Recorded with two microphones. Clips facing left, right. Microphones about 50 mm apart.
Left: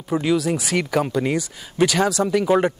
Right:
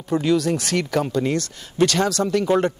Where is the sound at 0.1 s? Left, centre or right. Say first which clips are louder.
Right 1 dB; centre.